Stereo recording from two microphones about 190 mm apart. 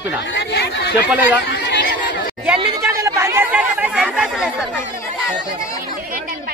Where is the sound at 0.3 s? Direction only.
60° left (ahead or behind).